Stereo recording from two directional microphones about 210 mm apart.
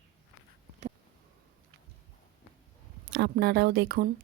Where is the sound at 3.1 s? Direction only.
50° right (ahead or behind).